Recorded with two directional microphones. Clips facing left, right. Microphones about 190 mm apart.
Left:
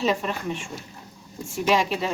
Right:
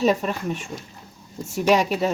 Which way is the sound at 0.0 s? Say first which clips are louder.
Right 4 dB; 40° right (ahead or behind).